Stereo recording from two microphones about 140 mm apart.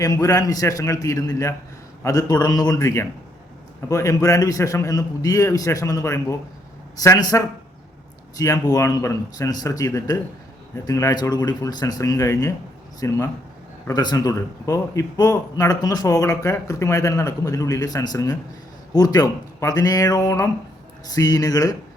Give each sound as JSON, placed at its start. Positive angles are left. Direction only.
{"t": 0.0, "sound": "a man's voice", "side_deg": 25}